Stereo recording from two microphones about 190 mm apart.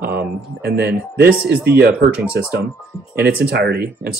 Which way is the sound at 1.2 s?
10° right (ahead or behind).